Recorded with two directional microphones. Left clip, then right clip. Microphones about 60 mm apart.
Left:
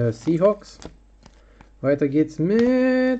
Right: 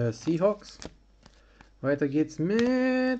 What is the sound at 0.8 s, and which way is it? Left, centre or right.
Speech, right.